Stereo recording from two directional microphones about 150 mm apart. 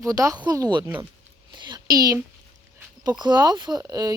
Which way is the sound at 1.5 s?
30° right (ahead or behind).